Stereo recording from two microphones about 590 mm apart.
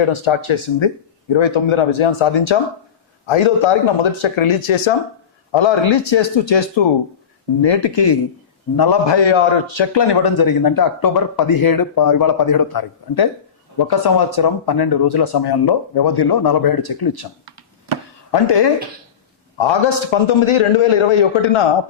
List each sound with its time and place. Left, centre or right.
0.0 s a man's voice: left
18.3 s a man's voice: left